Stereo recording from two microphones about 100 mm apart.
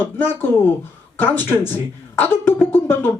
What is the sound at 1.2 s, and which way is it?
Speech, 20° left (ahead or behind).